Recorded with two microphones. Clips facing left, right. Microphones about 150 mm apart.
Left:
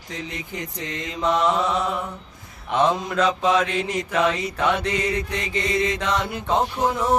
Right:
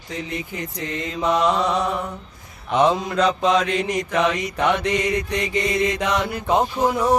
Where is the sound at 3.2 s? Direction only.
5° left (ahead or behind).